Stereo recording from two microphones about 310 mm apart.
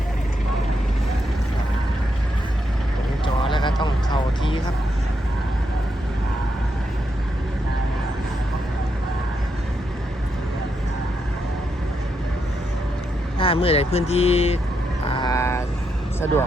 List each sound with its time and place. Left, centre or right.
3.4 s a sound: centre
13.4 s speech: centre
15.0 s vehicle: centre
16.2 s speech: centre